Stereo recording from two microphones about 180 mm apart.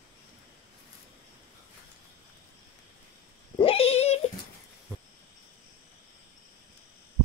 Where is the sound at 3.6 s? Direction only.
30° left (ahead or behind).